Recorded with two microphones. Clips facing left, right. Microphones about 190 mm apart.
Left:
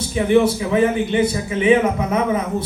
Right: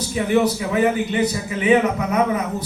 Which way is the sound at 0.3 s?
30° left (ahead or behind).